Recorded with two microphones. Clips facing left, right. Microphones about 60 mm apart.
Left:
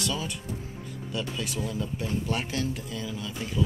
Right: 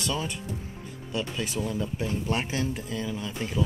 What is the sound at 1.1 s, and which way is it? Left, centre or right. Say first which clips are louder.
Speech: right 2 dB; centre.